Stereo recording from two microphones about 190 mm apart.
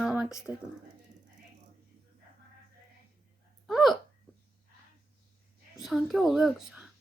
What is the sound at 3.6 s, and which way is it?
Hiccup, centre (ahead or behind).